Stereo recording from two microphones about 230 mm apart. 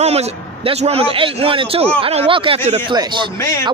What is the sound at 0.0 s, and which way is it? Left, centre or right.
Speech, right.